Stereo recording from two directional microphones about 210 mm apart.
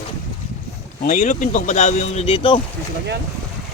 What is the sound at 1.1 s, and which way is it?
Speech, 35° left (ahead or behind).